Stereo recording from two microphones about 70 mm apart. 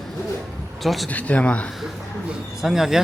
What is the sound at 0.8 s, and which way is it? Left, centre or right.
Speech, centre.